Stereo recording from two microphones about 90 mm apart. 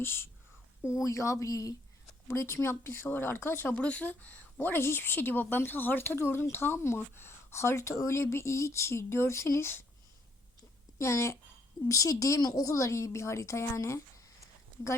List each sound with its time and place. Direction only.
0.0 s a woman's voice: 25° left (ahead or behind)
10.9 s a woman's voice: 30° left (ahead or behind)